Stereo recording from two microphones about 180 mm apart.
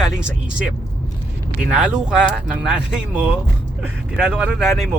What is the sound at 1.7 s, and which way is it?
Speech, 5° right (ahead or behind).